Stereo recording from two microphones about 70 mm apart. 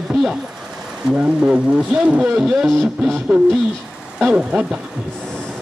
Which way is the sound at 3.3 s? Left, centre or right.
Right.